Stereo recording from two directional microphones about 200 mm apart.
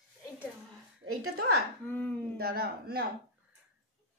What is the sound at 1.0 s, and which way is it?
Speech, 90° right.